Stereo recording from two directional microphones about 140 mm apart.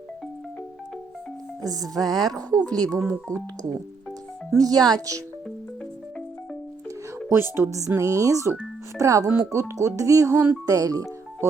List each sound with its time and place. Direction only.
1.6 s speech: 25° right (ahead or behind)
4.5 s speech: 25° right (ahead or behind)
7.3 s speech: 15° right (ahead or behind)